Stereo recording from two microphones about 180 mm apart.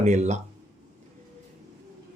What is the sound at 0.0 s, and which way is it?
Speech, 40° right (ahead or behind).